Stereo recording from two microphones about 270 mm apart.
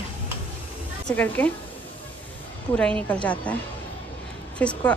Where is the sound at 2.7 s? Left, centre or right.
Centre.